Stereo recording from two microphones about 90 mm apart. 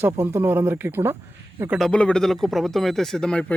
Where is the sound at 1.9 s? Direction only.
10° left (ahead or behind).